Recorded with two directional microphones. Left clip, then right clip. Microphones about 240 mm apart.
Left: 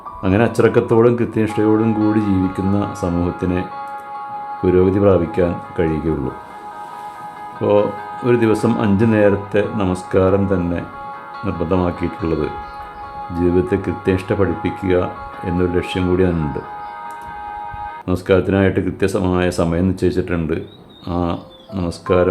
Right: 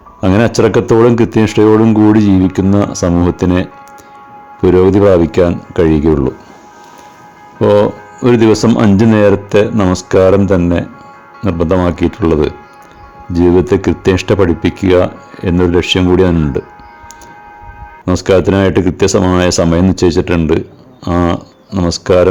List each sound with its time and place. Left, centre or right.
0.2 s speech: right
7.6 s speech: right
11.4 s speech: right
18.0 s speech: right
21.7 s speech: right